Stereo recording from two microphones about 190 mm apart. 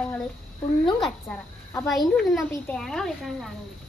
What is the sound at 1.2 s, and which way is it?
Speech, 10° left (ahead or behind).